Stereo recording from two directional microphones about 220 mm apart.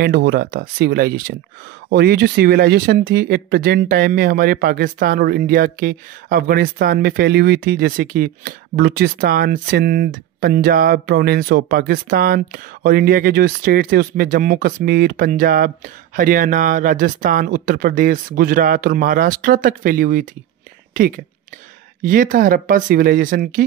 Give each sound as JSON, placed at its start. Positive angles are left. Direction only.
{"t": 0.0, "sound": "speech", "side_deg": -45}
{"t": 22.0, "sound": "speech", "side_deg": -35}